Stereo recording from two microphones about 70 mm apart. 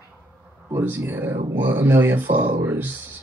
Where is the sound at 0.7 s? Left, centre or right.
Right.